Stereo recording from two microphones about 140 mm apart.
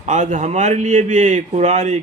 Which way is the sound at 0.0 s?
60° right (ahead or behind).